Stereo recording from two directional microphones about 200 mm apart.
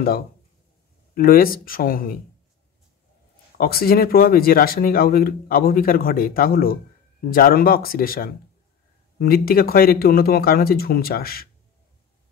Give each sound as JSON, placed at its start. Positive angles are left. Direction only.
{"t": 1.1, "sound": "speech", "side_deg": 45}
{"t": 3.5, "sound": "speech", "side_deg": 50}